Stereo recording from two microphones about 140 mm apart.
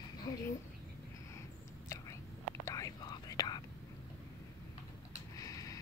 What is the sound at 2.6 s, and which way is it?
Whispering, 25° left (ahead or behind).